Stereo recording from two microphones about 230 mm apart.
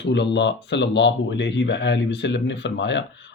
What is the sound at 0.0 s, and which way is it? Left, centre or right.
Speech, left.